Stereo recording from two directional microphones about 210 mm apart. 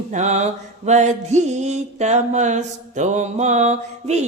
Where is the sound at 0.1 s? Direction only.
35° right (ahead or behind).